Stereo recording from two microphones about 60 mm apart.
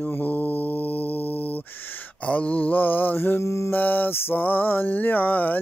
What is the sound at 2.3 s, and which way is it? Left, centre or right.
Music, left.